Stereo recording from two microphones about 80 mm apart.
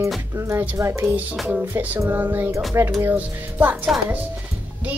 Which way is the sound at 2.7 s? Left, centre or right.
Right.